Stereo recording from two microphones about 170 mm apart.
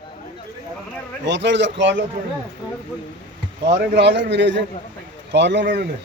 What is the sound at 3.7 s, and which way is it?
A man's voice, 80° right.